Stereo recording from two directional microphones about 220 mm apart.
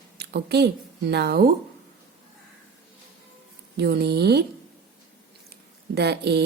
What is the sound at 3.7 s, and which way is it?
Speech, 50° right (ahead or behind).